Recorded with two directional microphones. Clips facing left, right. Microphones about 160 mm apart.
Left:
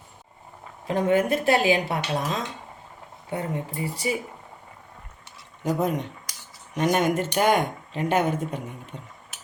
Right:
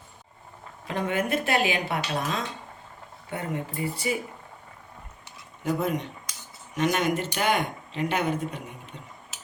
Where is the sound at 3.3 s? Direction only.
35° left (ahead or behind).